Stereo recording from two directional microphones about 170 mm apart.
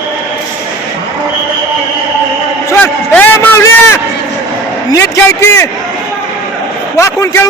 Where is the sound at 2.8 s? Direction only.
10° left (ahead or behind).